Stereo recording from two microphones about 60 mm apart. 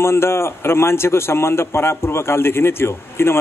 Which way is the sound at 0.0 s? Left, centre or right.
Left.